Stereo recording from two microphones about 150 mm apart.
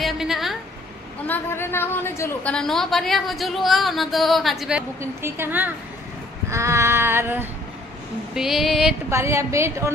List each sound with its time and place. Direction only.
0.0 s a sound: centre (ahead or behind)
1.2 s a woman's voice: 15° left (ahead or behind)
2.5 s a woman's voice: centre (ahead or behind)
5.2 s a sound: 15° right (ahead or behind)
8.4 s a woman's voice: centre (ahead or behind)
9.1 s a woman's voice: 20° right (ahead or behind)